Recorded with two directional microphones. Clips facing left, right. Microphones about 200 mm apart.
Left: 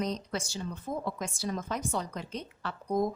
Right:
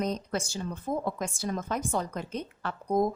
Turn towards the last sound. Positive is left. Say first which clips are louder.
# right 3 dB
turn(degrees=-50)  # may be behind; listen again after turning